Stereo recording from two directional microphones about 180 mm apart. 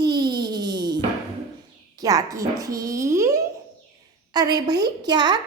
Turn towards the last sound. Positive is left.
turn(degrees=-25)  # may be behind; listen again after turning